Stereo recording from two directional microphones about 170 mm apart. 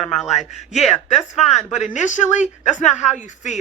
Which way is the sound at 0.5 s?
40° left (ahead or behind).